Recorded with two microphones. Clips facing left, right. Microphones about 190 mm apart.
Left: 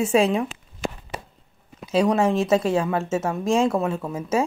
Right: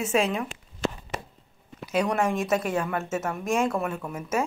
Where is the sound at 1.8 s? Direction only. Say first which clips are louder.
Left 5 dB; 25° left (ahead or behind).